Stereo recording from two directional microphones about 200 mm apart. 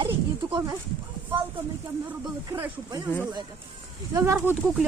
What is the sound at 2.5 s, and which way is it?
Speech, 15° right (ahead or behind).